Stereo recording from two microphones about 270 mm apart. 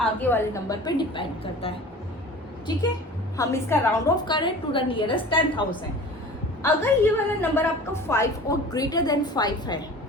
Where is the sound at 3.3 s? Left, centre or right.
Centre.